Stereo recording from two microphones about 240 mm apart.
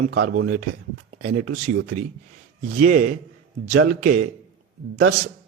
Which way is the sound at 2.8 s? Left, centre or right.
Right.